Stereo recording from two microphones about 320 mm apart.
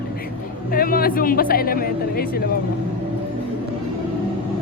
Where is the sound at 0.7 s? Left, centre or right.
Left.